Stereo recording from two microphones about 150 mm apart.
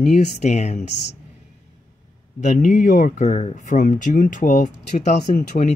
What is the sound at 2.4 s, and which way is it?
Speech, 60° left (ahead or behind).